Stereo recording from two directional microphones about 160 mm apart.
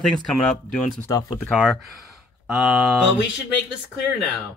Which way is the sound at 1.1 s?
25° left (ahead or behind).